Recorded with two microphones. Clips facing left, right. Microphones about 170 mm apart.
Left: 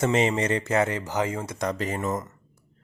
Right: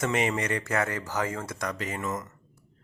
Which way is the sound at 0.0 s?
25° left (ahead or behind).